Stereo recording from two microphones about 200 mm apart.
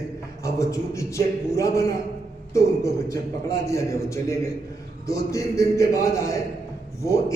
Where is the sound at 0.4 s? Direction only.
15° left (ahead or behind).